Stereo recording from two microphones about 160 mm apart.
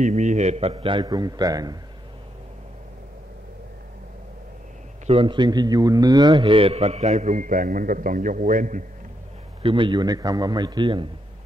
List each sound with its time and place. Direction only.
0.0 s a man's voice: 50° right (ahead or behind); by 1.8 s 25° right (ahead or behind)
5.0 s a man's voice: 35° right (ahead or behind); by 8.8 s 55° right (ahead or behind)
9.6 s a man's voice: 30° right (ahead or behind)